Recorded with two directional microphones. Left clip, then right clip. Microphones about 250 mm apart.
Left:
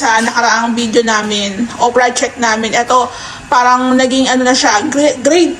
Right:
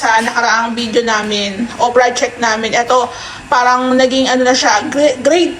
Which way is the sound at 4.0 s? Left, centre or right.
Centre.